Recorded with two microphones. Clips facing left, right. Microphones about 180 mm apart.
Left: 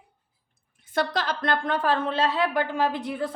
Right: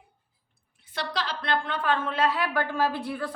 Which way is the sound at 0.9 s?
50° left (ahead or behind).